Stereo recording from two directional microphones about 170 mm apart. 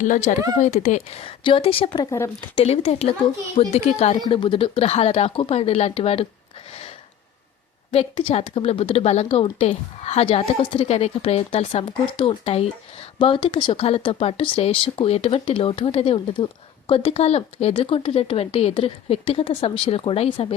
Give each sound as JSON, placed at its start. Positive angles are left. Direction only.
{"t": 0.0, "sound": "speech", "side_deg": 45}
{"t": 2.0, "sound": "a woman's voice", "side_deg": 20}
{"t": 2.6, "sound": "speech", "side_deg": 35}
{"t": 8.1, "sound": "speech", "side_deg": 30}